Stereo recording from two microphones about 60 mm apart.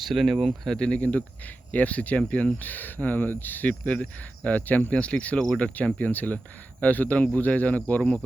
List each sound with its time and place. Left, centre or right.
0.0 s speech: centre
0.7 s speech: centre